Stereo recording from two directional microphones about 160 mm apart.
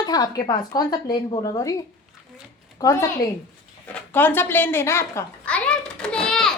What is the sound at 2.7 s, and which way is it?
Speech, 20° left (ahead or behind).